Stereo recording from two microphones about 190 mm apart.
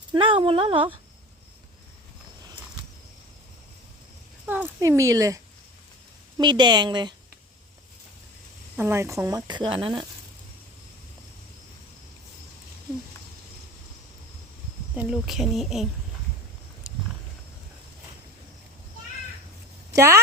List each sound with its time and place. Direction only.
0.1 s speech: 25° right (ahead or behind)
4.4 s speech: 10° right (ahead or behind)
8.7 s speech: 10° right (ahead or behind)
14.9 s speech: 5° right (ahead or behind)
19.9 s speech: 15° right (ahead or behind)